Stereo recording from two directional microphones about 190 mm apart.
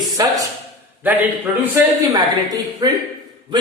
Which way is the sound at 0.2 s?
20° right (ahead or behind).